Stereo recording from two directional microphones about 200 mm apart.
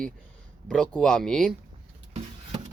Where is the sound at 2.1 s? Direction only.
35° right (ahead or behind).